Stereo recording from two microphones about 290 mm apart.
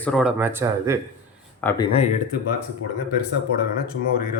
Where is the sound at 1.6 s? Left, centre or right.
Centre.